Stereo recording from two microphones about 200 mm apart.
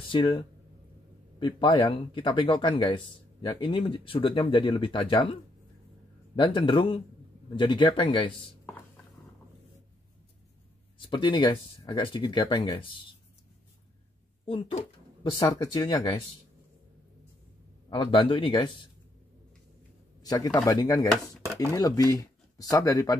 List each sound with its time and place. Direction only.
0.1 s speech: 25° left (ahead or behind)
1.4 s speech: 25° left (ahead or behind)
11.0 s speech: 25° left (ahead or behind)
14.4 s a sound: 30° left (ahead or behind)
15.3 s speech: 20° left (ahead or behind)
17.8 s speech: 25° left (ahead or behind)
20.2 s a man's voice: 20° left (ahead or behind)